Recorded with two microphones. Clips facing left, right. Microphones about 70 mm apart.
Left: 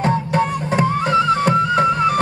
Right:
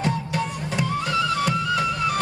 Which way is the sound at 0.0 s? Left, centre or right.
Left.